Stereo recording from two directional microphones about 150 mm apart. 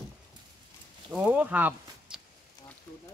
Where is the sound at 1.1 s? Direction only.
5° right (ahead or behind).